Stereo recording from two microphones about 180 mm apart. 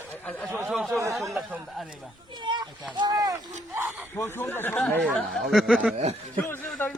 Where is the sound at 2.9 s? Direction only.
20° right (ahead or behind).